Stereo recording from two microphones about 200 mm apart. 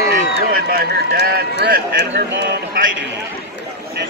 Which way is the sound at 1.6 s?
50° right (ahead or behind).